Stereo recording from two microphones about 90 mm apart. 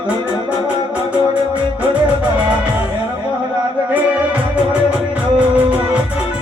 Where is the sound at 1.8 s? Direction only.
15° right (ahead or behind).